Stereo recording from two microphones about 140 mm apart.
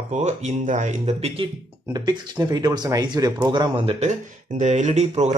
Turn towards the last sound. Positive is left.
turn(degrees=-50)  # may be behind; listen again after turning